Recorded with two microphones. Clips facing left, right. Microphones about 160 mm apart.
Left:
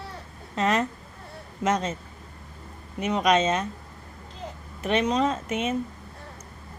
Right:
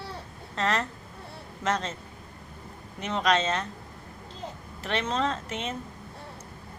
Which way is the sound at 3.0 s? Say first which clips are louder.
Left 4 dB; 15° left (ahead or behind).